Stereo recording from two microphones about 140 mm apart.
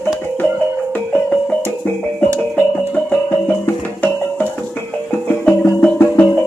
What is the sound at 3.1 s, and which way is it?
Music, 10° left (ahead or behind).